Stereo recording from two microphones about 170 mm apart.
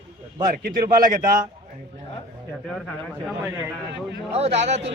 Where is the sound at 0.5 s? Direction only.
60° right (ahead or behind).